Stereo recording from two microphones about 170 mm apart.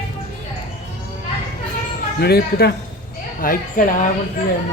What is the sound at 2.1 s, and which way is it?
Speech, 70° left (ahead or behind).